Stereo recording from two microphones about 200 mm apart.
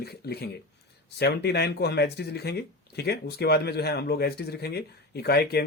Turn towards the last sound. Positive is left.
turn(degrees=55)  # may be behind; listen again after turning